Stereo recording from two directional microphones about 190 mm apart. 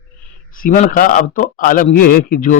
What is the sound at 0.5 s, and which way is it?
A man's voice, 45° left (ahead or behind).